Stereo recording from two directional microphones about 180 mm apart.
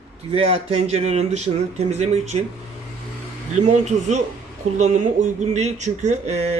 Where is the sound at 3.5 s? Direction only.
40° right (ahead or behind).